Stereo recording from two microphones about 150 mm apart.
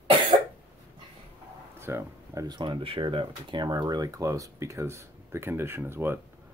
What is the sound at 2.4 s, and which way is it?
Speech, 30° right (ahead or behind).